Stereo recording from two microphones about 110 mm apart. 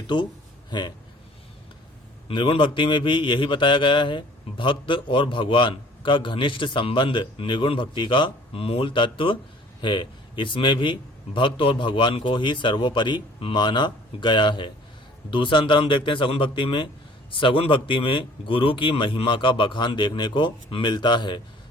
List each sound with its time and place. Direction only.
0.7 s a man's voice: 40° left (ahead or behind)
2.2 s a man's voice: 55° left (ahead or behind)